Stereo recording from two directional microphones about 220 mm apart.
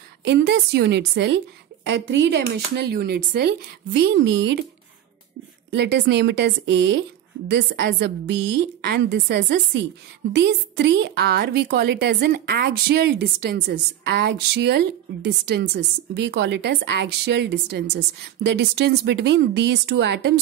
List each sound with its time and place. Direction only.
0.2 s a woman's voice: 50° right (ahead or behind)
5.7 s a woman's voice: 50° right (ahead or behind)